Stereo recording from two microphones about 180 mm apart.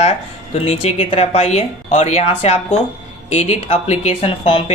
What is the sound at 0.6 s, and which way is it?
Speech, 35° left (ahead or behind).